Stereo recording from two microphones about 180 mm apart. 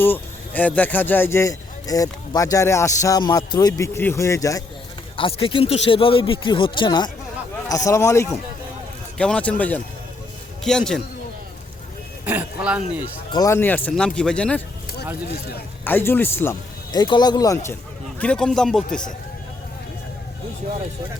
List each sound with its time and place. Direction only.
0.0 s speech: 10° left (ahead or behind)
5.1 s a man's voice: 30° left (ahead or behind); by 11.0 s 5° left (ahead or behind)
12.2 s a sound: 10° right (ahead or behind)
13.3 s speech: 15° left (ahead or behind)
15.8 s speech: 10° left (ahead or behind)
18.2 s a man's voice: 5° left (ahead or behind)